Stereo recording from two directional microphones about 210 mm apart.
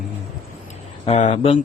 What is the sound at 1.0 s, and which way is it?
Speech, 30° left (ahead or behind).